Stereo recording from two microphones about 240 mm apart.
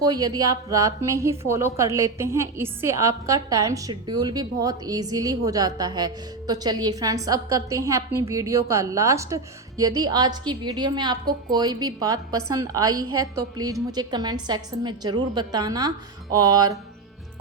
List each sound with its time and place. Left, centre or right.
0.0 s a woman's voice: centre
13.1 s a woman's voice: right
13.7 s a woman's voice: centre